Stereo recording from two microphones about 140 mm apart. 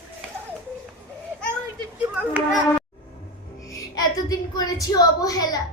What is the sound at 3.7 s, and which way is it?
Music, 25° left (ahead or behind).